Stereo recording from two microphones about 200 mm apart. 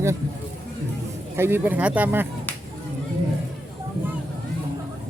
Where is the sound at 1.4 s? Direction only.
10° right (ahead or behind).